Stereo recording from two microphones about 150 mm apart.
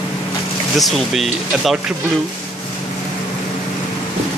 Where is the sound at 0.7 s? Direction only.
Centre (ahead or behind).